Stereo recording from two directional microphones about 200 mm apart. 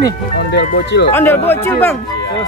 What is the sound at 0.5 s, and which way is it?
Speech, 55° left (ahead or behind).